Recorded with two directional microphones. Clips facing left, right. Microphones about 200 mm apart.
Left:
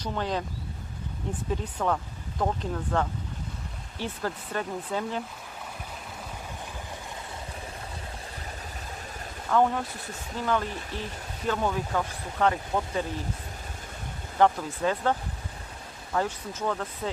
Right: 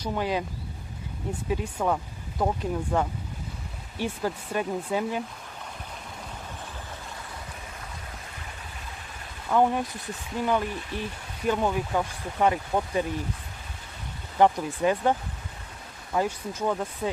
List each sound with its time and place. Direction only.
0.0 s speech: 10° right (ahead or behind)
9.5 s speech: 15° right (ahead or behind)
14.3 s speech: 15° right (ahead or behind)
16.1 s speech: 10° right (ahead or behind)